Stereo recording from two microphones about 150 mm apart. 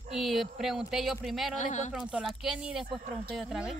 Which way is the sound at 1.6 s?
50° left (ahead or behind).